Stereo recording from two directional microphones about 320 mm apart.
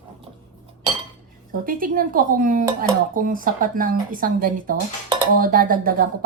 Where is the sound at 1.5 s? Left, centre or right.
Right.